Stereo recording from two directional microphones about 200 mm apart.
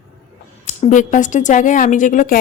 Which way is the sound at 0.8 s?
40° left (ahead or behind).